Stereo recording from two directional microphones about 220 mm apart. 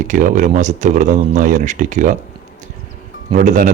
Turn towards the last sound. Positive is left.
turn(degrees=-35)  # may be behind; listen again after turning